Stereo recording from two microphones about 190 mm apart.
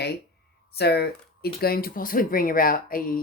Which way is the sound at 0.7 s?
55° left (ahead or behind).